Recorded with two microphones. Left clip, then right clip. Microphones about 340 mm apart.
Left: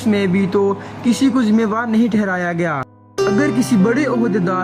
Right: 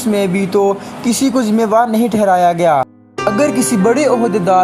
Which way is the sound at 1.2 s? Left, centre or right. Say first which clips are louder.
Right 3 dB; centre.